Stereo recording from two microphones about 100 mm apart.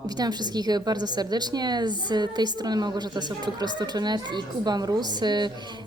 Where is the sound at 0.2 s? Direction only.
45° right (ahead or behind).